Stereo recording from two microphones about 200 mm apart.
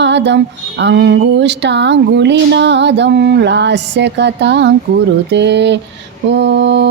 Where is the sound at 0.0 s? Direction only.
60° right (ahead or behind).